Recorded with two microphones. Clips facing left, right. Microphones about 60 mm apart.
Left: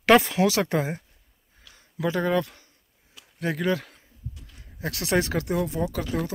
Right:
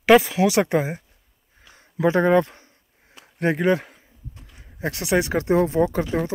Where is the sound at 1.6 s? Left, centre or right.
Right.